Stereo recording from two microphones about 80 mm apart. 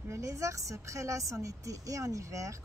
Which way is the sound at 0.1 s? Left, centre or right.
Right.